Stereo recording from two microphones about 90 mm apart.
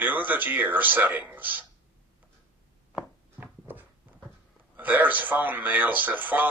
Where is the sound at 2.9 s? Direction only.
20° right (ahead or behind).